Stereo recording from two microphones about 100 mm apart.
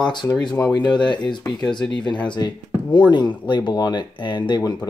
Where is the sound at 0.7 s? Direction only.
40° left (ahead or behind).